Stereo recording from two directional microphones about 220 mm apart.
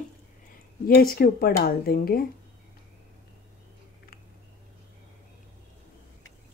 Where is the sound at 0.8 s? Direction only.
45° left (ahead or behind).